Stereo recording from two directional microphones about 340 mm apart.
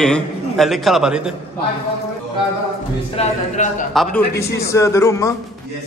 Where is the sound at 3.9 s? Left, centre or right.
Centre.